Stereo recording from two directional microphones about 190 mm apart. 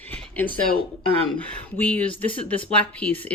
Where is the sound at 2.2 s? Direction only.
30° left (ahead or behind).